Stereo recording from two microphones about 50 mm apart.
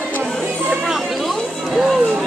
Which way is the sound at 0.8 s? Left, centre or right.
Centre.